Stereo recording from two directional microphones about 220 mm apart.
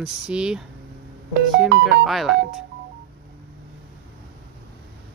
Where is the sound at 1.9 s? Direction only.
Centre (ahead or behind).